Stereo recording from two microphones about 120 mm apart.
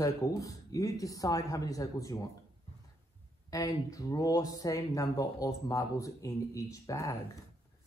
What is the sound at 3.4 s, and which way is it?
Speech, 30° left (ahead or behind).